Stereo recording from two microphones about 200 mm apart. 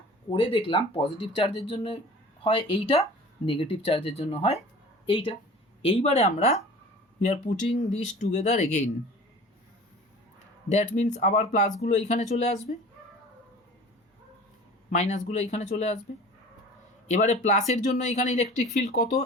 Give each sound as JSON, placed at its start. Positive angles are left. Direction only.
{"t": 0.3, "sound": "speech", "side_deg": 25}
{"t": 10.7, "sound": "speech", "side_deg": 35}
{"t": 14.8, "sound": "speech", "side_deg": 35}
{"t": 17.1, "sound": "speech", "side_deg": 35}